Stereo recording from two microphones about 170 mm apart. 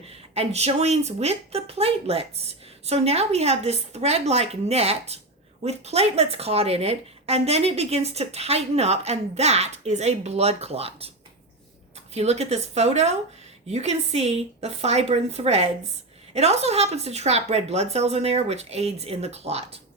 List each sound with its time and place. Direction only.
0.3 s a woman's voice: 40° right (ahead or behind)
12.1 s a woman's voice: 40° right (ahead or behind)